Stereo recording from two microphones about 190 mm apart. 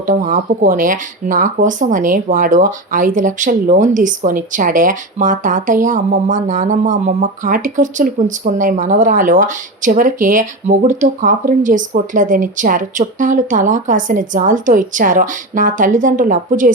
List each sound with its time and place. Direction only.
0.0 s speech: 45° right (ahead or behind)